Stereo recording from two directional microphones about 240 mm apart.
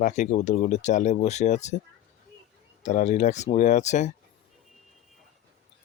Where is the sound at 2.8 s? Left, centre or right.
Left.